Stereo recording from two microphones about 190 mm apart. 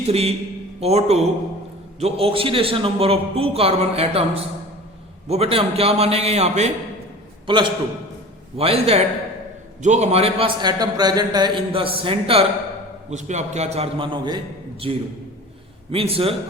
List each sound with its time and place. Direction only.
0.0 s a man's voice: 35° right (ahead or behind)